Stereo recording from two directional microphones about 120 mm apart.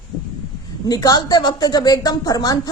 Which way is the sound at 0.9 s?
30° left (ahead or behind).